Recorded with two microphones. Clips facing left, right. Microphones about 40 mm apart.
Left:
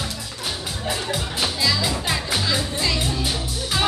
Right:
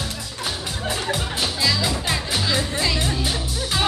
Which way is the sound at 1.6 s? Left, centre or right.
Centre.